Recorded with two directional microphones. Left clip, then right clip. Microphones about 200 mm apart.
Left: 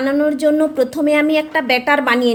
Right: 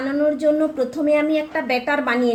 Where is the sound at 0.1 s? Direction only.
40° left (ahead or behind).